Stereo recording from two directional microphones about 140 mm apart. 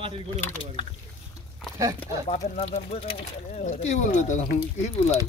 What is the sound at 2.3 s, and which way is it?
Speech, 50° left (ahead or behind).